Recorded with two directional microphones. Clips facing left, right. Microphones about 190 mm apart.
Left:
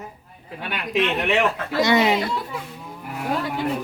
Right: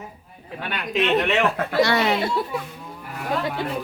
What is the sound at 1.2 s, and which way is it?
Speech, 15° left (ahead or behind).